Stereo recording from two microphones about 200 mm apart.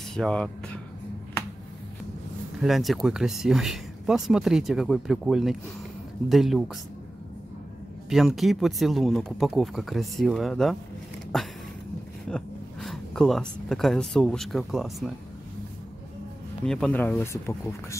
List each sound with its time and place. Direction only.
0.1 s speech: 5° left (ahead or behind)
2.6 s speech: centre (ahead or behind)
8.1 s speech: centre (ahead or behind)
12.3 s speech: 5° left (ahead or behind)
16.6 s speech: 5° left (ahead or behind)